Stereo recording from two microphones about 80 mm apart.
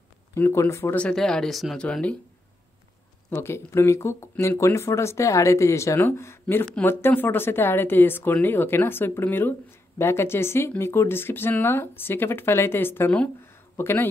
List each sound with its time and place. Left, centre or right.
0.4 s speech: left
1.1 s speech: centre
1.8 s speech: centre
3.3 s speech: left